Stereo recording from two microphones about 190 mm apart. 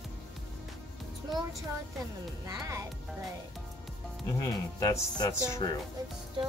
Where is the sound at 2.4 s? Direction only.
15° right (ahead or behind).